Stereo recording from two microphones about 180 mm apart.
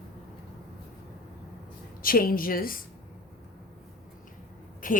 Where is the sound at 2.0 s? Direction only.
55° left (ahead or behind).